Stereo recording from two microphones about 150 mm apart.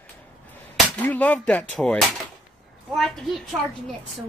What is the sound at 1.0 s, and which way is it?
A woman's voice, 10° left (ahead or behind).